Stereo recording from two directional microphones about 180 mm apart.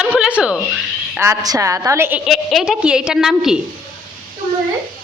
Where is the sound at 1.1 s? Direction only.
15° right (ahead or behind).